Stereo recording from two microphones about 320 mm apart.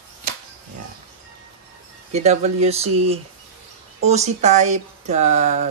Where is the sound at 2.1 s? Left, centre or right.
Centre.